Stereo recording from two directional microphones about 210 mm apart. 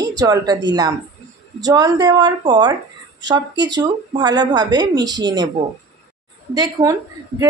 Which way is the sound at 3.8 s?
20° right (ahead or behind).